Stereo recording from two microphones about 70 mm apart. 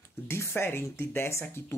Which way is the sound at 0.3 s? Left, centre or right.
Left.